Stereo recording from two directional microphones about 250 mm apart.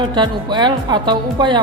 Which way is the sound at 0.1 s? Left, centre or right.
Centre.